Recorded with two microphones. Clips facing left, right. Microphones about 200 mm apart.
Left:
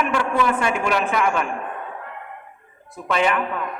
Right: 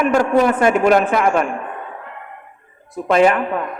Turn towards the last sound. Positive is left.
turn(degrees=-45)  # may be behind; listen again after turning